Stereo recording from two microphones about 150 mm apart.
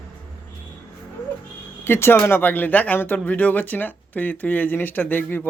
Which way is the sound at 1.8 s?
15° left (ahead or behind).